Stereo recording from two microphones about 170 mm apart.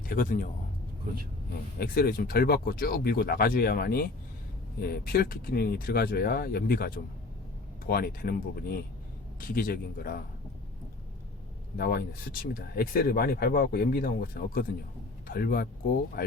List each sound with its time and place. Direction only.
0.1 s a man's voice: 55° left (ahead or behind)
1.8 s speech: 60° left (ahead or behind)
9.4 s speech: 55° left (ahead or behind)
11.8 s speech: 60° left (ahead or behind)